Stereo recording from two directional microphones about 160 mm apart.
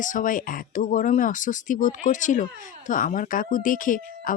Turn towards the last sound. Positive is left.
turn(degrees=60)  # may be behind; listen again after turning